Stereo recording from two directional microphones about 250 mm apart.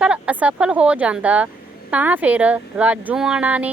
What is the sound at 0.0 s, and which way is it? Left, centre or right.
Speech, centre.